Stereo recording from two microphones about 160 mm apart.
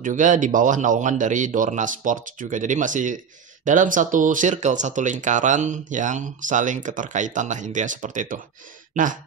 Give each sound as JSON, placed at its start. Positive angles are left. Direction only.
{"t": 0.0, "sound": "speech", "side_deg": -55}